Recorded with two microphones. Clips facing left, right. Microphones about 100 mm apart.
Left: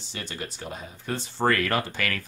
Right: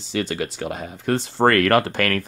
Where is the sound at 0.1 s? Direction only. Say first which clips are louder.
Right 12 dB; 90° right.